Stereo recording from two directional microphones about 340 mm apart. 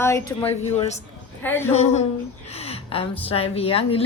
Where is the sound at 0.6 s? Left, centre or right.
Centre.